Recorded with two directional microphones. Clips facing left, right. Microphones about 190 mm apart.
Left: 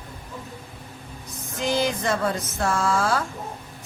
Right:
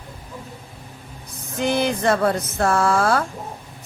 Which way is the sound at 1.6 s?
60° right (ahead or behind).